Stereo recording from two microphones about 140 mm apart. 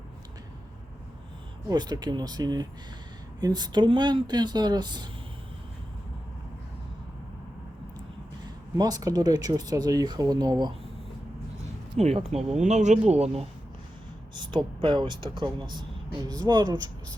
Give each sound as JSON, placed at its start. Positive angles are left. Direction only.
{"t": 1.6, "sound": "speech", "side_deg": -30}
{"t": 8.8, "sound": "speech", "side_deg": -25}
{"t": 11.9, "sound": "speech", "side_deg": -45}
{"t": 14.3, "sound": "speech", "side_deg": -35}